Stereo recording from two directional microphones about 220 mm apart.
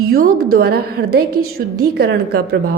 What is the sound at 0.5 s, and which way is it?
A woman's voice, 45° right (ahead or behind).